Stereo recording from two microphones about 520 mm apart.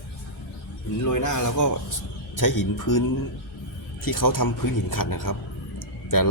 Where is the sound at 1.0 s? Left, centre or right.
Left.